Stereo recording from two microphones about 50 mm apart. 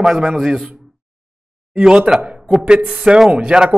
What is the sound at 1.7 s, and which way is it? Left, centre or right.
Speech, centre.